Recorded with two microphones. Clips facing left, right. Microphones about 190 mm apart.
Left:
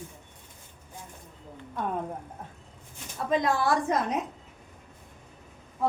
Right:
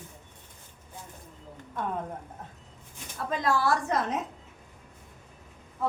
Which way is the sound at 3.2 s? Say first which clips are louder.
Left 1 dB; 20° left (ahead or behind).